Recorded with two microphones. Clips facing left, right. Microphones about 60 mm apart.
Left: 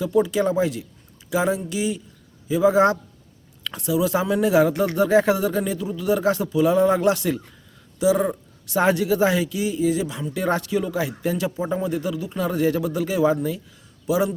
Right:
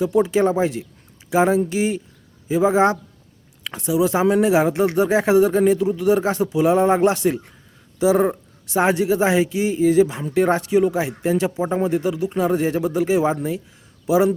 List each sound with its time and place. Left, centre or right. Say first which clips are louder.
0.0 s speech: right 3 dB; right